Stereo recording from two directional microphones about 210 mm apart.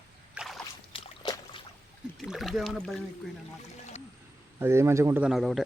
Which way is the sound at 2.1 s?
Centre (ahead or behind).